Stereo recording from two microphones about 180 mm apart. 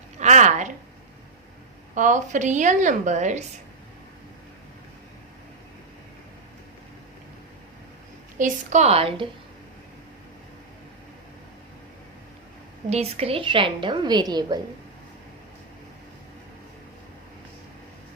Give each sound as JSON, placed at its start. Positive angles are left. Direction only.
{"t": 0.2, "sound": "a sound", "side_deg": -40}
{"t": 2.0, "sound": "a woman's voice", "side_deg": -45}
{"t": 8.4, "sound": "a woman's voice", "side_deg": -45}
{"t": 12.9, "sound": "a woman's voice", "side_deg": -35}